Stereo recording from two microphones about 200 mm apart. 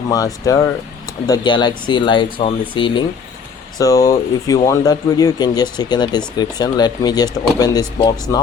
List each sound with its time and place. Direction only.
0.1 s speech: 20° left (ahead or behind)